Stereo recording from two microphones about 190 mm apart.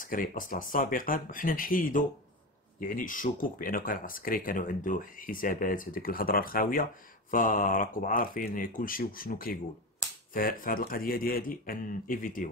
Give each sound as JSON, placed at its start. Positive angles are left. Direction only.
{"t": 0.0, "sound": "speech", "side_deg": 45}